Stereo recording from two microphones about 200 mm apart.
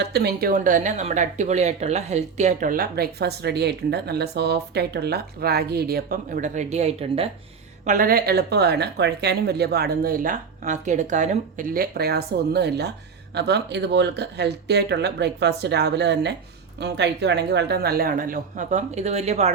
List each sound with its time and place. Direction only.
0.0 s speech: 55° right (ahead or behind); by 7.3 s 30° right (ahead or behind)
7.9 s speech: 45° right (ahead or behind)